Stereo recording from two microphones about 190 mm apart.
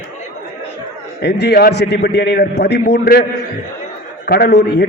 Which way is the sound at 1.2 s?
60° left (ahead or behind).